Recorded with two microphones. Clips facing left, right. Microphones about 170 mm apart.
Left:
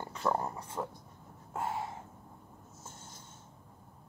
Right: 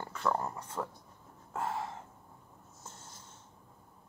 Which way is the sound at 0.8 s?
15° left (ahead or behind).